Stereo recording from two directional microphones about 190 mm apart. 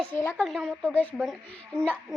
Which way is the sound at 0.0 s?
10° left (ahead or behind).